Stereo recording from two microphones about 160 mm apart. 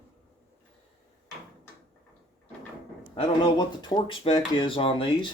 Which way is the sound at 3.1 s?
30° left (ahead or behind).